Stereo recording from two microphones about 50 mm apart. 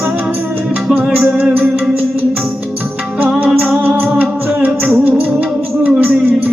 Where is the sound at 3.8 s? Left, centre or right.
Right.